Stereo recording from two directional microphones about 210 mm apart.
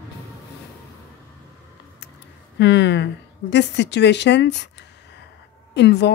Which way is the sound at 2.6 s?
55° left (ahead or behind).